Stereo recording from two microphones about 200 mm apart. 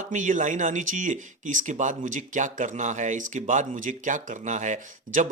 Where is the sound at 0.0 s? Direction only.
40° right (ahead or behind).